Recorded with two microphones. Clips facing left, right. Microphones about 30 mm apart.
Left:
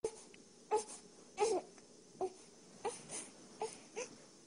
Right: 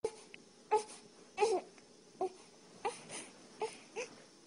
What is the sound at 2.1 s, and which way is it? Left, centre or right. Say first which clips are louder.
Baby cry: right 3 dB; right.